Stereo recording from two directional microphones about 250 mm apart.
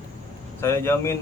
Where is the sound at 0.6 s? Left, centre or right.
Centre.